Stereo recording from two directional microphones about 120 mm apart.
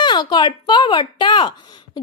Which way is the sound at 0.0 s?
40° left (ahead or behind).